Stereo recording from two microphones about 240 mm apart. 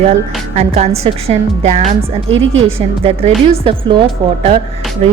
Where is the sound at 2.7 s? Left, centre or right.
Right.